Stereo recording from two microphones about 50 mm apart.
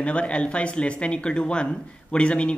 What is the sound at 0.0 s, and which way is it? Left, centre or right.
Speech, left.